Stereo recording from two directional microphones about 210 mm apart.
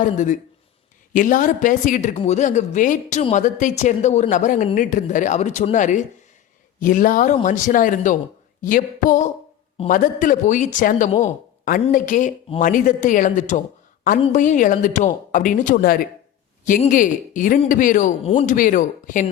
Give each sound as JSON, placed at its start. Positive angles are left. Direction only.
{"t": 0.0, "sound": "speech", "side_deg": 35}